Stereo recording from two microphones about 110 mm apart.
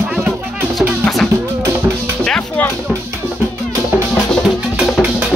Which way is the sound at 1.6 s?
20° right (ahead or behind).